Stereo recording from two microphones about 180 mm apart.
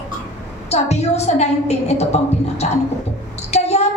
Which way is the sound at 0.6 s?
35° left (ahead or behind).